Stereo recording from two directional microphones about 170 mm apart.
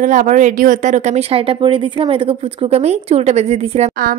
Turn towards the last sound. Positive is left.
turn(degrees=-40)  # may be behind; listen again after turning